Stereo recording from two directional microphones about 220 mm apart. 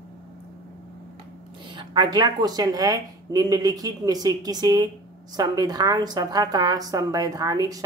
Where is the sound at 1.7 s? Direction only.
20° right (ahead or behind).